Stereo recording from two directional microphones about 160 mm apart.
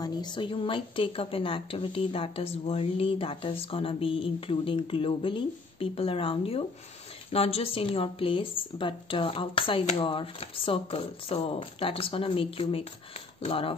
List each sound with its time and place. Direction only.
0.0 s a woman's voice: 30° left (ahead or behind)